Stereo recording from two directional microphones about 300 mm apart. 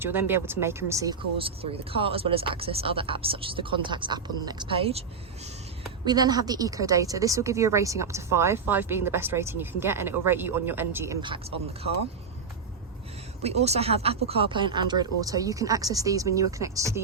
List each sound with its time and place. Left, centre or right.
0.0 s a woman's voice: centre
6.1 s a woman's voice: centre
13.4 s a woman's voice: right